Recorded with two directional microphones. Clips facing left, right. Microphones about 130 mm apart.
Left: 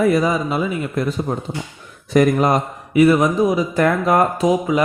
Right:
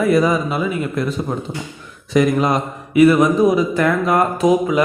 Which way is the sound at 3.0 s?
30° left (ahead or behind).